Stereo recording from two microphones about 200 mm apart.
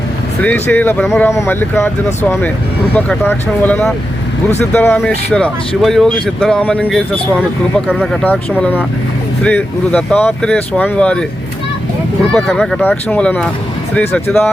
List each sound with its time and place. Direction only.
0.4 s speech: 10° left (ahead or behind)
7.9 s speech: 5° right (ahead or behind)
8.2 s speech: 5° left (ahead or behind)
12.3 s speech: centre (ahead or behind)